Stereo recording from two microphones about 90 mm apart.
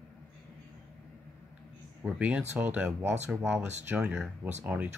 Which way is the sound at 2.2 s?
15° right (ahead or behind).